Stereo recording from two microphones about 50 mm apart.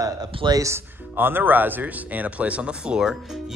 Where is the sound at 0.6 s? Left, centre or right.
Right.